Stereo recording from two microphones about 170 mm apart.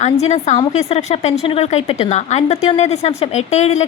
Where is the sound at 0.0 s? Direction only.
40° left (ahead or behind).